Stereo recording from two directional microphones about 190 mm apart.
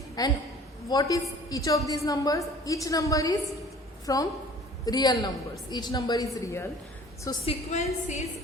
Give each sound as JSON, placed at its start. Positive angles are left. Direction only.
{"t": 0.2, "sound": "a woman's voice", "side_deg": 20}
{"t": 7.4, "sound": "a woman's voice", "side_deg": 40}